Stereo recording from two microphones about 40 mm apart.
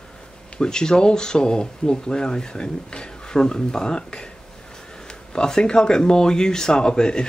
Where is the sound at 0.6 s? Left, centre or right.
Centre.